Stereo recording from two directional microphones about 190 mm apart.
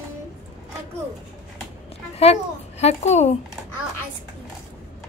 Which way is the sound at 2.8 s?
35° left (ahead or behind).